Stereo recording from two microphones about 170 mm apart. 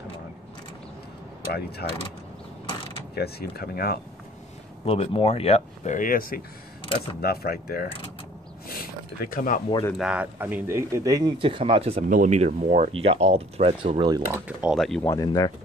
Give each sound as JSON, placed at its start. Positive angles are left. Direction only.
{"t": 1.8, "sound": "speech", "side_deg": 70}
{"t": 3.2, "sound": "speech", "side_deg": 65}
{"t": 4.8, "sound": "speech", "side_deg": 35}
{"t": 5.9, "sound": "speech", "side_deg": 55}
{"t": 8.6, "sound": "a sound", "side_deg": 60}
{"t": 9.9, "sound": "speech", "side_deg": -5}
{"t": 12.1, "sound": "speech", "side_deg": -45}
{"t": 14.3, "sound": "speech", "side_deg": -10}
{"t": 14.8, "sound": "speech", "side_deg": 0}
{"t": 15.0, "sound": "speech", "side_deg": 20}